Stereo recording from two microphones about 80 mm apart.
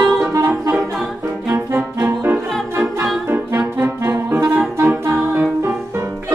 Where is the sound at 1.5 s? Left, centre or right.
Right.